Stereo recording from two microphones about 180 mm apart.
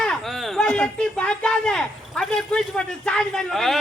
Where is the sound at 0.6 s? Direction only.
10° left (ahead or behind).